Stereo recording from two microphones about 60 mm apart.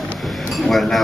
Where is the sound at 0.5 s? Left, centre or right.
Centre.